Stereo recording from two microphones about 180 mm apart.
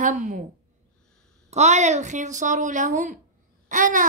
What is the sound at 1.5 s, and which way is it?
A woman's voice, 40° right (ahead or behind).